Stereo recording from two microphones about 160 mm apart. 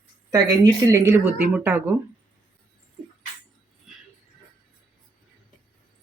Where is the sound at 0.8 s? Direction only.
20° right (ahead or behind).